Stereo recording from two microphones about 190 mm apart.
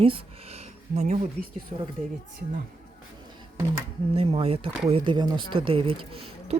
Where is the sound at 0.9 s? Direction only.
35° right (ahead or behind).